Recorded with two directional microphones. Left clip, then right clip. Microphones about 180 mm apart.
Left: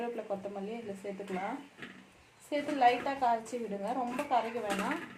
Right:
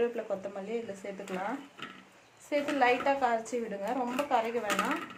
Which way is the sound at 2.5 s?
20° right (ahead or behind).